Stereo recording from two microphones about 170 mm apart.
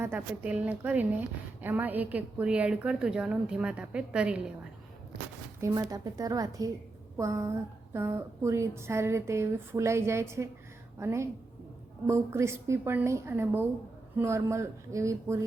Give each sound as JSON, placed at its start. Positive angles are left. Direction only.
{"t": 0.0, "sound": "a woman's voice", "side_deg": -10}
{"t": 5.5, "sound": "a woman's voice", "side_deg": -20}